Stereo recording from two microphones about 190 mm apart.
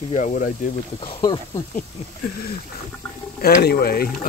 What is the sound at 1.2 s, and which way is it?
Speech, 20° left (ahead or behind).